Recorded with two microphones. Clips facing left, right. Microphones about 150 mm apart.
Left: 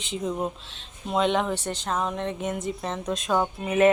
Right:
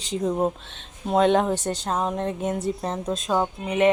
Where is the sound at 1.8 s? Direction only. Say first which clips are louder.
Right 2 dB; 35° right (ahead or behind).